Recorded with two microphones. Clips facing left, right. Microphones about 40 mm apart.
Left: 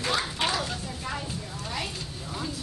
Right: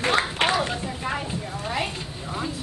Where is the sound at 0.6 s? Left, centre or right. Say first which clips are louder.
Right 6 dB; right.